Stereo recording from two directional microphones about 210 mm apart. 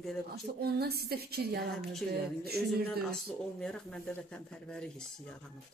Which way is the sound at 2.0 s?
5° left (ahead or behind).